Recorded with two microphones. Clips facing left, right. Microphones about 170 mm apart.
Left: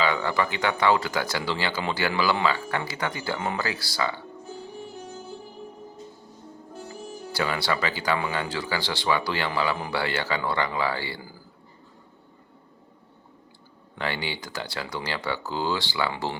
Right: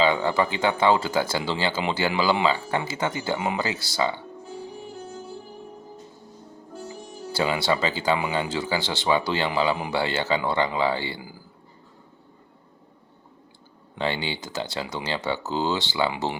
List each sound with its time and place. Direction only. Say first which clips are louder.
0.0 s speech: right 3 dB; 25° right (ahead or behind)
3.3 s speech: right 2 dB; 15° right (ahead or behind)
7.3 s speech: right 3 dB; 25° right (ahead or behind)
9.7 s speech: right 2 dB; 15° right (ahead or behind)
10.0 s speech: right 3 dB; 25° right (ahead or behind)
14.0 s speech: right 3 dB; 25° right (ahead or behind)